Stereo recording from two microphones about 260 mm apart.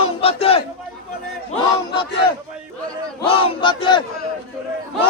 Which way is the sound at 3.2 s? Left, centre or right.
Left.